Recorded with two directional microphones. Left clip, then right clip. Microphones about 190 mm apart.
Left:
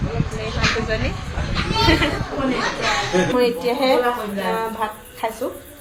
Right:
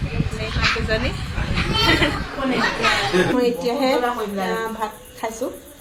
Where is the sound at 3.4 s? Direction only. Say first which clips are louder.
Left 1 dB; 5° right (ahead or behind).